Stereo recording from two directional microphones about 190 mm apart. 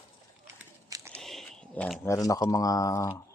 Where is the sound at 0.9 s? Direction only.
15° right (ahead or behind).